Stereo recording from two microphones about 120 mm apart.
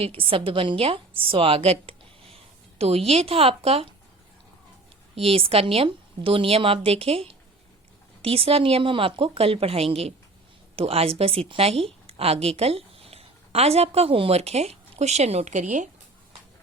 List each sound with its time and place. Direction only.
0.2 s a woman's voice: 50° right (ahead or behind)
5.1 s a woman's voice: 50° right (ahead or behind); by 15.9 s 85° right